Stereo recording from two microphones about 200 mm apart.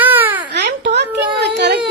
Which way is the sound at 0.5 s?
60° right (ahead or behind).